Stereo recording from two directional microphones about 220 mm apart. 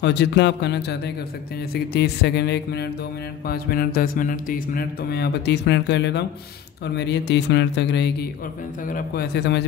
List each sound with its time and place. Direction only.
0.0 s speech: 50° left (ahead or behind)